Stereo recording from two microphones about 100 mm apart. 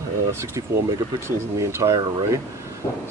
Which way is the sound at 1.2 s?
30° right (ahead or behind).